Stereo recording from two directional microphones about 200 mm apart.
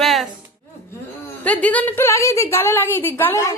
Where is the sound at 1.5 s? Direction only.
5° left (ahead or behind).